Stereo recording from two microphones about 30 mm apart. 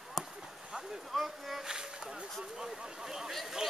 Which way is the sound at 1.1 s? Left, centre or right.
Centre.